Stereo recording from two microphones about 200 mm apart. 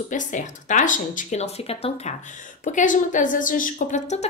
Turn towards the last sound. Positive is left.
turn(degrees=35)  # may be behind; listen again after turning